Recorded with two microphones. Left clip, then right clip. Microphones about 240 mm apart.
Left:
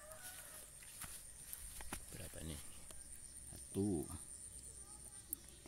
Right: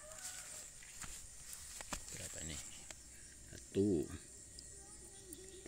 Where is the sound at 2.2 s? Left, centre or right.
Left.